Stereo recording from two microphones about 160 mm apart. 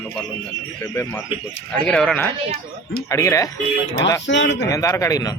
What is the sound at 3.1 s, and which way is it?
Speech, 20° left (ahead or behind).